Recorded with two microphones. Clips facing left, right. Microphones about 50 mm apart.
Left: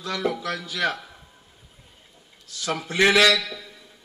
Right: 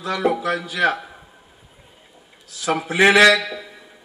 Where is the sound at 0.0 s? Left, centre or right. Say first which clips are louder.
Right 6 dB; centre.